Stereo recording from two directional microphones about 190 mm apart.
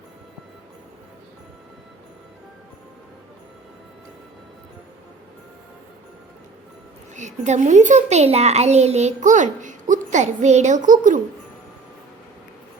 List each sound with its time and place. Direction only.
7.2 s a child's voice: 40° right (ahead or behind)